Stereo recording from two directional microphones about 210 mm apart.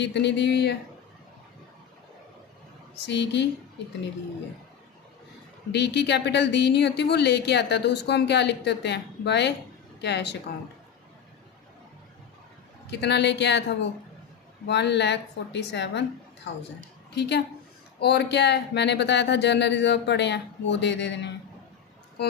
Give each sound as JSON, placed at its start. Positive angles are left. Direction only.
{"t": 0.0, "sound": "speech", "side_deg": 55}
{"t": 3.1, "sound": "speech", "side_deg": 55}
{"t": 5.7, "sound": "speech", "side_deg": 55}
{"t": 12.9, "sound": "a woman's voice", "side_deg": 55}